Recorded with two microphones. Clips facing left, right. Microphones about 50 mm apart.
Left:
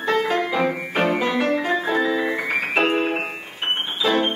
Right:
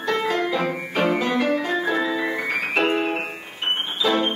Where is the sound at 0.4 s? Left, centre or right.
Centre.